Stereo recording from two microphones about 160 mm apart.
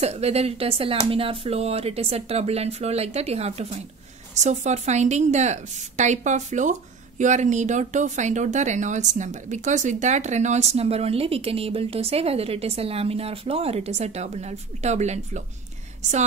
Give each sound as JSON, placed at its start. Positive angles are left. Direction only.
{"t": 0.0, "sound": "a woman's voice", "side_deg": -40}